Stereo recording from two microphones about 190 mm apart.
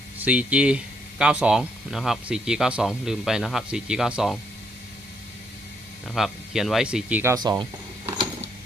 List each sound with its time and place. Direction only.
0.2 s speech: 5° right (ahead or behind)
6.1 s speech: centre (ahead or behind)
7.3 s a sound: 20° right (ahead or behind)